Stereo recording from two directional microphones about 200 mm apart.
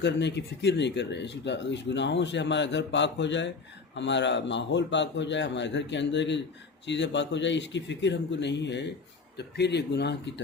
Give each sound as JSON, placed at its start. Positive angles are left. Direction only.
{"t": 0.0, "sound": "speech", "side_deg": 60}